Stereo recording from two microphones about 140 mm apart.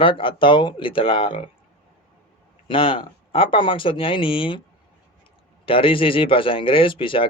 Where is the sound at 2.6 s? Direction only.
35° left (ahead or behind).